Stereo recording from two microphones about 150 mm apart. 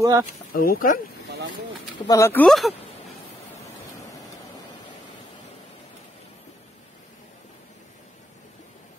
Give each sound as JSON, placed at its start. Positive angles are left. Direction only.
{"t": 0.0, "sound": "speech", "side_deg": -20}
{"t": 0.5, "sound": "speech", "side_deg": 75}
{"t": 2.0, "sound": "speech", "side_deg": 20}
{"t": 2.4, "sound": "speech", "side_deg": 0}